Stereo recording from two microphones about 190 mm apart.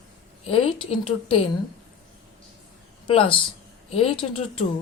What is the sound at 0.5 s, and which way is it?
Speech, 30° left (ahead or behind).